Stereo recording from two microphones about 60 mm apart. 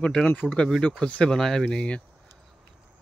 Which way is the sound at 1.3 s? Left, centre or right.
Centre.